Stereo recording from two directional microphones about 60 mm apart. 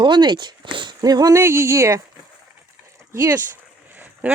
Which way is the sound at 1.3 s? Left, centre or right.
Right.